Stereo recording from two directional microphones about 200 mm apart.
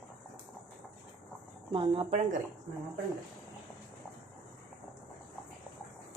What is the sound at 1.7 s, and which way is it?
Speech, 25° right (ahead or behind).